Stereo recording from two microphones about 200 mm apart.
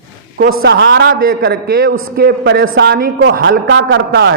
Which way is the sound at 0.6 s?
60° right (ahead or behind).